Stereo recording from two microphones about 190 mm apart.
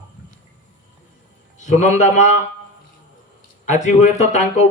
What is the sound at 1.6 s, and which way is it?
Speech, 40° left (ahead or behind).